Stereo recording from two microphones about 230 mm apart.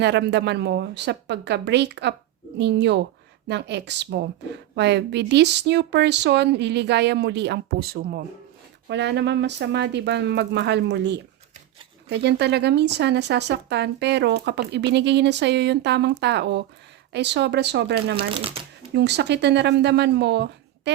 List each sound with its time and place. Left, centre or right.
0.0 s speech: right
18.3 s speech: right
18.9 s speech: right